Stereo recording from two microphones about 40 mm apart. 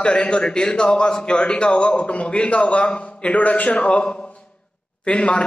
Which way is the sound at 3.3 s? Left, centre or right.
Left.